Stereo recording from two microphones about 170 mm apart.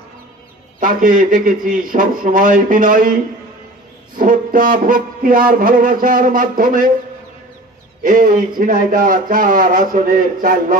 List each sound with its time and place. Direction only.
0.7 s speech: 50° right (ahead or behind)
4.2 s speech: 55° right (ahead or behind)
8.0 s speech: 50° right (ahead or behind)